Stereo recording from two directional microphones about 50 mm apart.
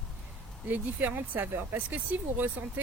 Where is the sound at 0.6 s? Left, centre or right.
Right.